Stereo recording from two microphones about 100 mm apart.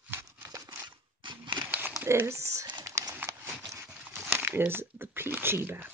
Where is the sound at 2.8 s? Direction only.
35° right (ahead or behind).